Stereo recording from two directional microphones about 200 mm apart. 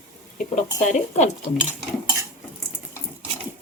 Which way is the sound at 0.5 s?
35° left (ahead or behind).